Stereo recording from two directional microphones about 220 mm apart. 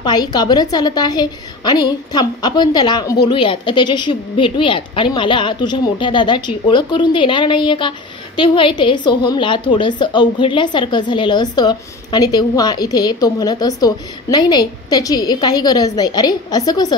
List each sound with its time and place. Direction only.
0.0 s a woman's voice: 20° left (ahead or behind)